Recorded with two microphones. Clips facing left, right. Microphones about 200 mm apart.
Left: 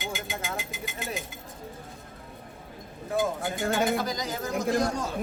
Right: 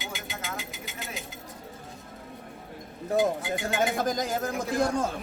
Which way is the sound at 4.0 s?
50° right (ahead or behind).